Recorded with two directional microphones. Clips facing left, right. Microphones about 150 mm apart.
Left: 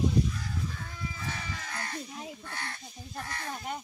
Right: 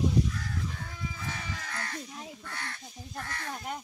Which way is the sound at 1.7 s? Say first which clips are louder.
Left 1 dB; 20° left (ahead or behind).